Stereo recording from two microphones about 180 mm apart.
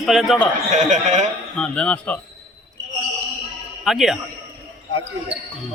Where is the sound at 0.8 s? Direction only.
45° right (ahead or behind).